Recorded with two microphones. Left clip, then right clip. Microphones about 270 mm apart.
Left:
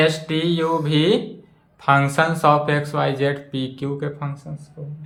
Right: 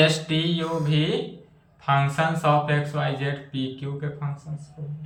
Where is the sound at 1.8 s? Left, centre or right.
Left.